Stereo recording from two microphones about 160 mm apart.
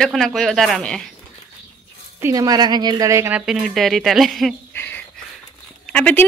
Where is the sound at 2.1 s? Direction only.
20° right (ahead or behind); by 4.6 s centre (ahead or behind).